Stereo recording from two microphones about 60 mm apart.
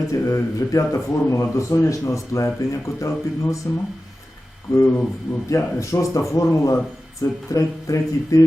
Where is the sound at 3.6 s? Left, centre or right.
Left.